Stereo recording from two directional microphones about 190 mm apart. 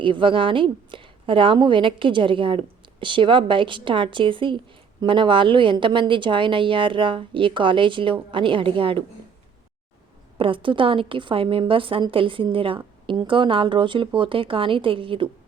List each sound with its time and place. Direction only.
0.0 s a woman's voice: 25° right (ahead or behind)
10.3 s a woman's voice: 25° right (ahead or behind)